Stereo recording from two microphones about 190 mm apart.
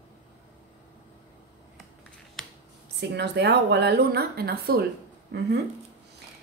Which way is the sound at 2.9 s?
60° right (ahead or behind).